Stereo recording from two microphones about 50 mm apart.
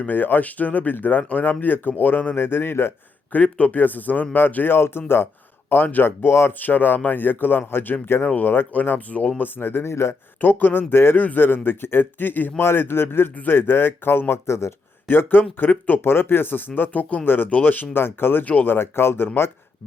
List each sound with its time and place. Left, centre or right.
0.1 s speech: left
2.3 s speech: left
3.3 s speech: left
6.5 s speech: left
9.4 s speech: left
10.4 s speech: left
15.0 s speech: left
17.2 s speech: left
18.4 s speech: left
18.7 s speech: left